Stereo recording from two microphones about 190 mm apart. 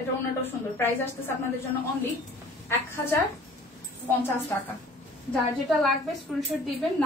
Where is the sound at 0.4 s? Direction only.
10° left (ahead or behind).